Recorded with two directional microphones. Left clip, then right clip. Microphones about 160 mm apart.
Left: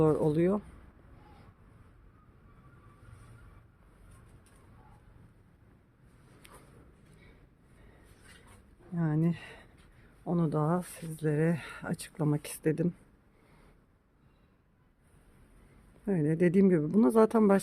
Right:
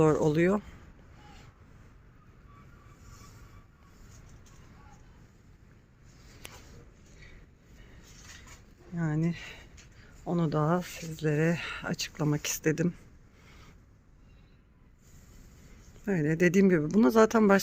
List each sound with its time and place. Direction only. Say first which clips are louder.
0.0 s speech: right 2 dB; 5° right (ahead or behind)
9.0 s speech: even; 15° left (ahead or behind)
10.2 s speech: right 2 dB; 5° left (ahead or behind)
16.0 s speech: right 2 dB; 5° left (ahead or behind)